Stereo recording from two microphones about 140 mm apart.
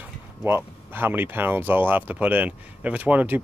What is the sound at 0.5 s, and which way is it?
Speech, 15° right (ahead or behind).